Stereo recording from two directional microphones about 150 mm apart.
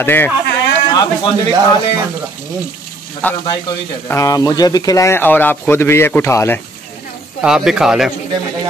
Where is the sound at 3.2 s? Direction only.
10° left (ahead or behind).